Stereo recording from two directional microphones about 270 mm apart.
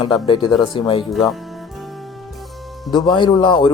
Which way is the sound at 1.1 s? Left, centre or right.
Centre.